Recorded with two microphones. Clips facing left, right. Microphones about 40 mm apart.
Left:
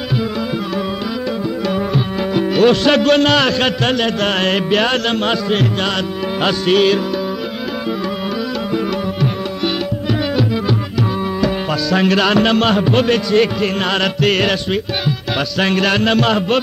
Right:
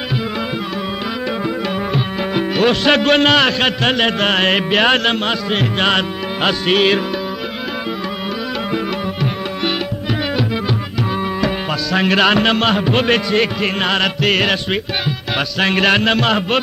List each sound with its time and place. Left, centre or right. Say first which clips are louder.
2.0 s speech: left 1 dB; centre
4.0 s mantra: right 1 dB; right
5.2 s speech: left 2 dB; centre
5.8 s mantra: right 2 dB; right
11.4 s speech: left 2 dB; centre